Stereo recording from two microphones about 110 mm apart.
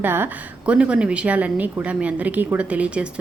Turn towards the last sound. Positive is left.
turn(degrees=-10)  # may be behind; listen again after turning